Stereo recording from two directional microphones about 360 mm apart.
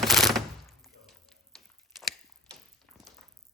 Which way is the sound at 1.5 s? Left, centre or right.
Centre.